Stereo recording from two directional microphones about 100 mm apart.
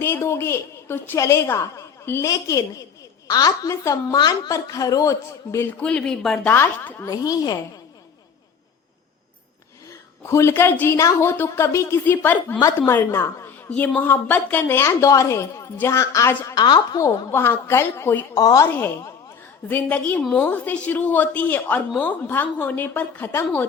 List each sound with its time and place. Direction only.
0.0 s a woman's voice: 25° left (ahead or behind)
5.8 s a woman's voice: 10° left (ahead or behind)
6.5 s a woman's voice: 25° left (ahead or behind)
7.1 s a woman's voice: 40° left (ahead or behind)
9.9 s a woman's voice: 30° left (ahead or behind)
12.5 s a woman's voice: 40° left (ahead or behind)
12.9 s a woman's voice: 25° left (ahead or behind)
16.6 s a woman's voice: 45° left (ahead or behind)
17.3 s a woman's voice: 25° left (ahead or behind)
18.3 s a woman's voice: 35° left (ahead or behind)
19.6 s a woman's voice: 15° left (ahead or behind)